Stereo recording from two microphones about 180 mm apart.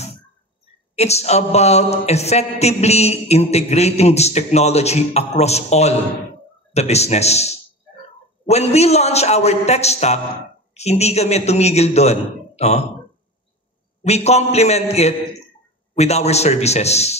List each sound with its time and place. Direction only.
0.9 s speech: 35° left (ahead or behind)
14.0 s speech: 35° left (ahead or behind)